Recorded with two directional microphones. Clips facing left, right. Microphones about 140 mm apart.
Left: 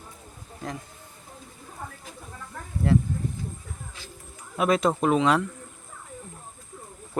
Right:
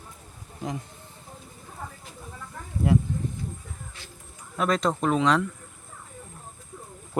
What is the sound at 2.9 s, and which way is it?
Speech, 15° right (ahead or behind).